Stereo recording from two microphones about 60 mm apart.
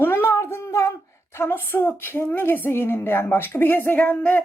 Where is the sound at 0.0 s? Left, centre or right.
Left.